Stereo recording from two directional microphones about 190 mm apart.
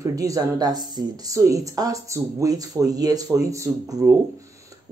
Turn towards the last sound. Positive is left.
turn(degrees=-20)  # may be behind; listen again after turning